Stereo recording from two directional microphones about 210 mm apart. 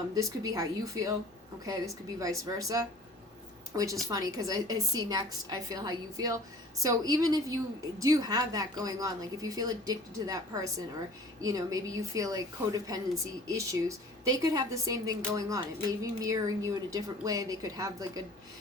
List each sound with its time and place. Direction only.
0.1 s a woman's voice: 15° right (ahead or behind)